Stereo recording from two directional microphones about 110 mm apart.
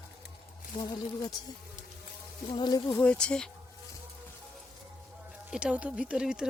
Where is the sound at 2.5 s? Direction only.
40° left (ahead or behind).